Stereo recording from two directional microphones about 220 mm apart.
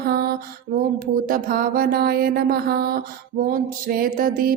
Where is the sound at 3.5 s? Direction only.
40° right (ahead or behind).